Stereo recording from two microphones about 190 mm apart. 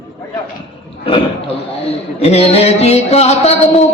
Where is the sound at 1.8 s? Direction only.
35° left (ahead or behind).